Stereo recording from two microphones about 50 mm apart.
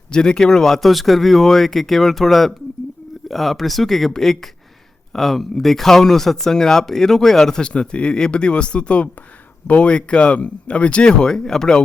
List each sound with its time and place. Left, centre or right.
0.1 s speech: centre